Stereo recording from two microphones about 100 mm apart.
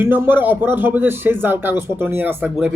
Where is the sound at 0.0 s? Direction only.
20° right (ahead or behind).